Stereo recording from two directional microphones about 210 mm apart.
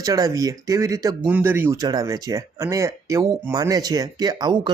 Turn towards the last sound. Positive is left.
turn(degrees=-20)  # may be behind; listen again after turning